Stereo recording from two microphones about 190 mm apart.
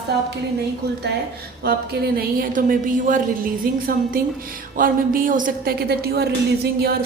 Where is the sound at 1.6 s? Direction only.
55° right (ahead or behind).